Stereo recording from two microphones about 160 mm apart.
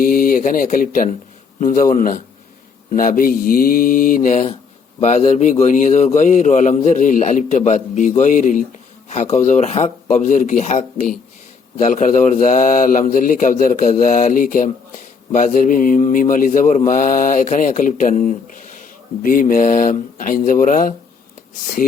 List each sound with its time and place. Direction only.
0.0 s speech: 65° left (ahead or behind)
4.9 s a man's voice: 45° left (ahead or behind)
19.2 s speech: 60° left (ahead or behind)